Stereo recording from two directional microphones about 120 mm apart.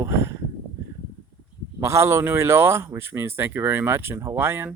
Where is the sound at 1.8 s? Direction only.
25° right (ahead or behind).